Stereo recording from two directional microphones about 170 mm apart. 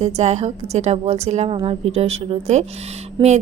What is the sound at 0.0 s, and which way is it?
A woman's voice, 40° right (ahead or behind).